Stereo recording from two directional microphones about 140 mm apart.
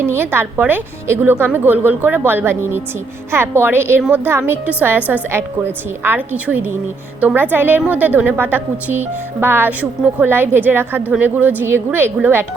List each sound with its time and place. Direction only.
0.0 s a woman's voice: 15° right (ahead or behind)